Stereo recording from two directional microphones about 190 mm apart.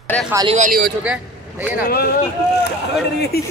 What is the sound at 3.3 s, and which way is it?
Speech, 55° left (ahead or behind).